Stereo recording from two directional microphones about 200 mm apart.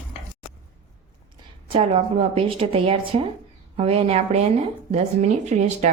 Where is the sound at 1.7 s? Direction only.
30° right (ahead or behind).